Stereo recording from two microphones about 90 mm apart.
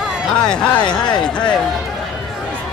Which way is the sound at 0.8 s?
55° left (ahead or behind).